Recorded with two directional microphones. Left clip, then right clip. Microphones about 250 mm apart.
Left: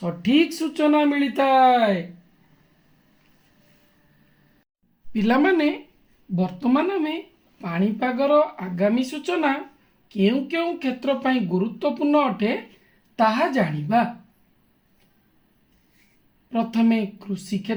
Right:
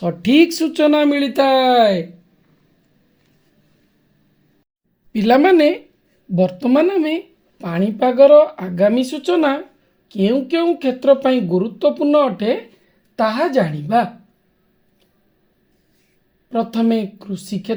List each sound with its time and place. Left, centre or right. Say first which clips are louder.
0.0 s speech: right 7 dB; right
5.1 s speech: right 8 dB; right
16.5 s speech: right 4 dB; right